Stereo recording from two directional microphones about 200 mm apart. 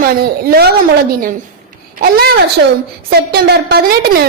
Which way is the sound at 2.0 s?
50° right (ahead or behind).